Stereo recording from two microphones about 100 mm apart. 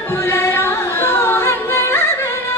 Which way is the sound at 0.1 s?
25° left (ahead or behind).